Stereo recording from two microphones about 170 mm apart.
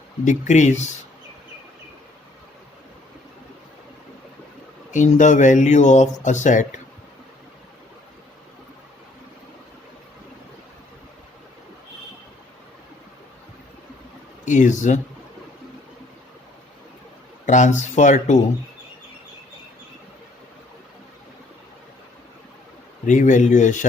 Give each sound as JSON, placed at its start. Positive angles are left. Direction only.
{"t": 0.3, "sound": "speech", "side_deg": 45}
{"t": 4.9, "sound": "speech", "side_deg": 45}
{"t": 14.4, "sound": "speech", "side_deg": 45}
{"t": 17.4, "sound": "speech", "side_deg": 45}
{"t": 23.0, "sound": "speech", "side_deg": 45}